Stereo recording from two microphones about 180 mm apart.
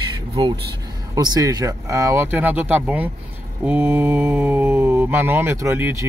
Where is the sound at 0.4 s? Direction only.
30° right (ahead or behind).